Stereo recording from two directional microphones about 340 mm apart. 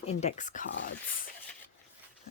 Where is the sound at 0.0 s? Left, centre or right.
Centre.